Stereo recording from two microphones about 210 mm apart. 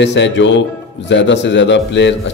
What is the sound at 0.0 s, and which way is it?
Speech, 55° left (ahead or behind).